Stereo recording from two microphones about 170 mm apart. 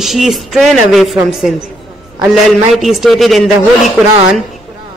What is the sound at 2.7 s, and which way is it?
Speech, centre (ahead or behind).